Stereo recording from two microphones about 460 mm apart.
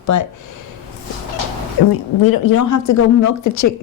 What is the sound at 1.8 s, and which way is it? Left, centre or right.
A woman's voice, left.